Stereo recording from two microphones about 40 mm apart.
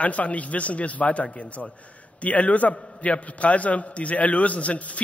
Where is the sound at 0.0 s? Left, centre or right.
Left.